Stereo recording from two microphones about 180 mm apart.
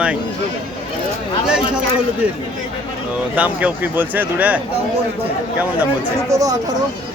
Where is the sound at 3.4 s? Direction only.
10° right (ahead or behind).